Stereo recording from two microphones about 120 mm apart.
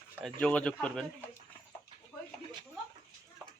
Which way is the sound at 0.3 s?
10° left (ahead or behind).